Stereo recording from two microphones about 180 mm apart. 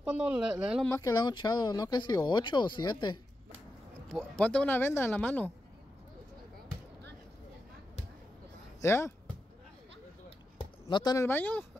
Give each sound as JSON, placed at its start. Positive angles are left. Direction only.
{"t": 0.0, "sound": "speech", "side_deg": -5}
{"t": 0.8, "sound": "speech", "side_deg": 20}
{"t": 4.1, "sound": "speech", "side_deg": 5}
{"t": 8.8, "sound": "speech", "side_deg": 15}
{"t": 10.9, "sound": "speech", "side_deg": 25}
{"t": 11.2, "sound": "speech", "side_deg": 10}